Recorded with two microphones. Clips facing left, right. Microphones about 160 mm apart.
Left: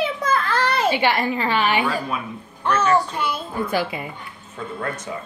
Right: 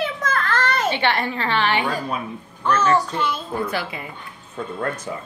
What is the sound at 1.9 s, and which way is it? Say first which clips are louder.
Speech: even; 40° right (ahead or behind).